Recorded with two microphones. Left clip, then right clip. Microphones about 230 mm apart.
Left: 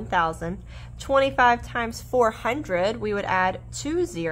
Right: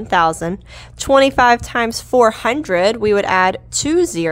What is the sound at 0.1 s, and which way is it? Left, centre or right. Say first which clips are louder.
A woman's voice: right 9 dB; right.